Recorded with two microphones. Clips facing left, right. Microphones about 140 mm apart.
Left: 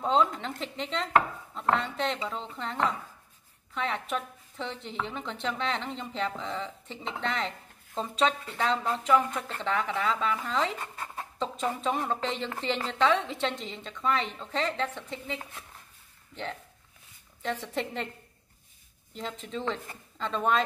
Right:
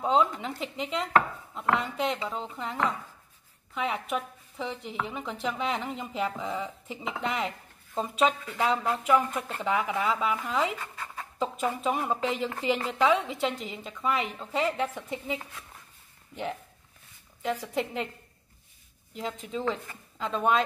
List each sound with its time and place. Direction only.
0.0 s chopping: 5° right (ahead or behind)
3.7 s a woman's voice: 5° right (ahead or behind)
17.4 s chopping: 5° right (ahead or behind)
19.1 s chopping: 5° right (ahead or behind)